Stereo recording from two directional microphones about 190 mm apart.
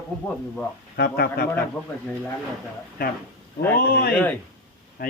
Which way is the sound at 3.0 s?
50° left (ahead or behind).